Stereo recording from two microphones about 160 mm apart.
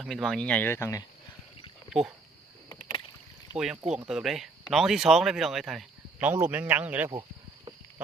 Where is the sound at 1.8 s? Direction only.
5° right (ahead or behind).